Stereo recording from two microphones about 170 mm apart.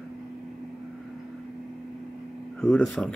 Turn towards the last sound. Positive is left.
turn(degrees=5)  # may be behind; listen again after turning